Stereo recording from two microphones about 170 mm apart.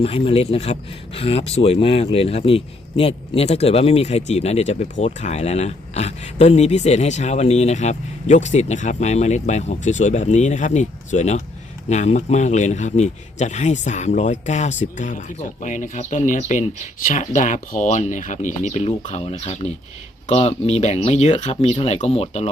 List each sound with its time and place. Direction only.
0.0 s speech: 35° left (ahead or behind)